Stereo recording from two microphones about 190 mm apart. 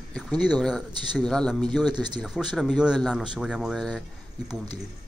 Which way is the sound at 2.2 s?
5° right (ahead or behind).